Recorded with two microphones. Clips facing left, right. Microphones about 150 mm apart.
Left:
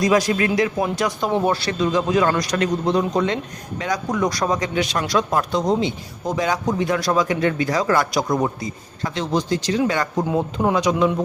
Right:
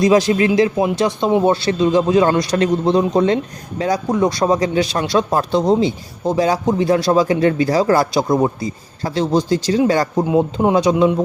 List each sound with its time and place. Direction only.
0.0 s a man's voice: 25° right (ahead or behind)
10.2 s speech: 20° right (ahead or behind)